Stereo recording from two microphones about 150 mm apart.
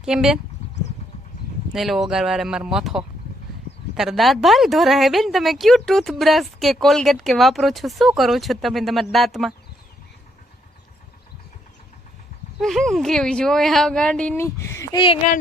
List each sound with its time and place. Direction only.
0.0 s a woman's voice: 5° right (ahead or behind)
1.7 s a woman's voice: centre (ahead or behind)
12.5 s a woman's voice: centre (ahead or behind)
14.3 s speech: 20° left (ahead or behind)
14.9 s speech: 35° left (ahead or behind)